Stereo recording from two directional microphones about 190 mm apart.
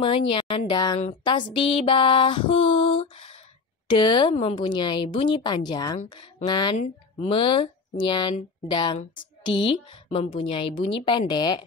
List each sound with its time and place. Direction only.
0.0 s speech: 25° left (ahead or behind)